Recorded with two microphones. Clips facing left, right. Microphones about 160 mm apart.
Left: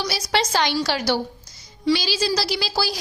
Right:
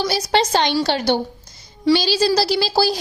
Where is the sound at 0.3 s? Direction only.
30° right (ahead or behind).